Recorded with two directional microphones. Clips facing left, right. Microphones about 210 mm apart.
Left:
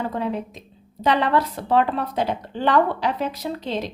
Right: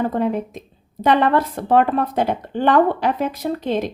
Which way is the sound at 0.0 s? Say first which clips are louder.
Right 5 dB; 50° right (ahead or behind).